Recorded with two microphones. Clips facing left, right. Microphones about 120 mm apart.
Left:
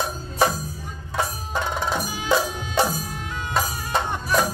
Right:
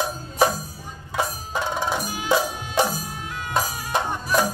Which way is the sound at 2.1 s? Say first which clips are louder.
Even; 5° right (ahead or behind).